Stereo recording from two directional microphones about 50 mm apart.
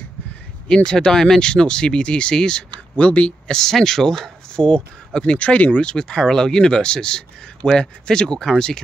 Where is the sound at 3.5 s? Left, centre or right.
Centre.